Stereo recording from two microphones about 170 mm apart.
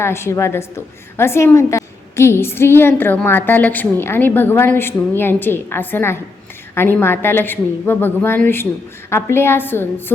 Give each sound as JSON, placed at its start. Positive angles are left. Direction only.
{"t": 0.0, "sound": "a woman's voice", "side_deg": 15}